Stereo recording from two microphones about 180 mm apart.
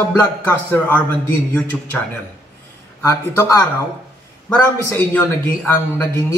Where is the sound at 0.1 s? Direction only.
10° left (ahead or behind).